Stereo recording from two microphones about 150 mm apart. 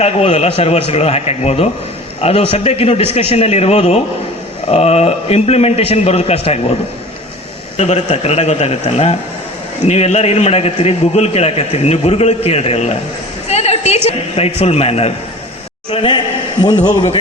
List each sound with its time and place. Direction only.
0.0 s a man's voice: 45° left (ahead or behind)
7.8 s a man's voice: 45° left (ahead or behind)
13.5 s a sound: 45° left (ahead or behind)
14.1 s a man's voice: 45° left (ahead or behind)